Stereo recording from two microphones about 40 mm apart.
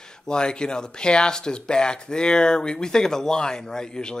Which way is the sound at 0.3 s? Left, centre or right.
Left.